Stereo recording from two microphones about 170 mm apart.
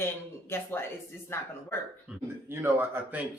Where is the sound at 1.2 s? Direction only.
15° left (ahead or behind).